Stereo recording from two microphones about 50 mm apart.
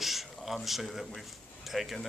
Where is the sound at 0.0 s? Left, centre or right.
Centre.